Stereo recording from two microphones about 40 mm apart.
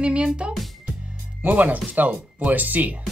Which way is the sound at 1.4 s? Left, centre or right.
Right.